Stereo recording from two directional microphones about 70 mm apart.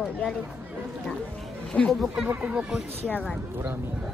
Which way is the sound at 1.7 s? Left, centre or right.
Centre.